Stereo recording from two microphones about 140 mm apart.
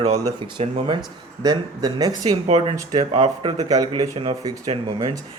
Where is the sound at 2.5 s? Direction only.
40° right (ahead or behind).